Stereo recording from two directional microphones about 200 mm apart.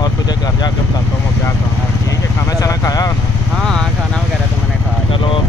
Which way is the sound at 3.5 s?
Centre (ahead or behind).